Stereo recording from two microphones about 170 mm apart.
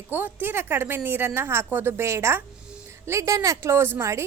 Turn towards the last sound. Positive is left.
turn(degrees=-15)  # may be behind; listen again after turning